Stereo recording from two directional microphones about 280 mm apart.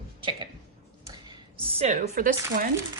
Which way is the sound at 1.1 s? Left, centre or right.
Centre.